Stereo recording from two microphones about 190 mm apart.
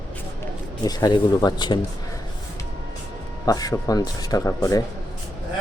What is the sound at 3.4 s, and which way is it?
Speech, 20° left (ahead or behind).